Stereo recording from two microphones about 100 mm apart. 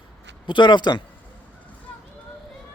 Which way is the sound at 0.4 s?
50° left (ahead or behind).